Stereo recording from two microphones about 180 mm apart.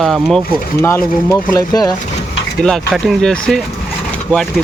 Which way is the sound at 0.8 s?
15° left (ahead or behind).